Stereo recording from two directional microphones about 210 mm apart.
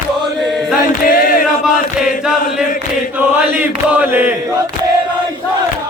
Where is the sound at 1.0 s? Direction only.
40° left (ahead or behind).